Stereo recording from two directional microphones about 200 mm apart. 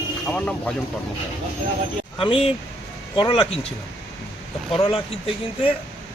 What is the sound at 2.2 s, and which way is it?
Speech, 25° left (ahead or behind).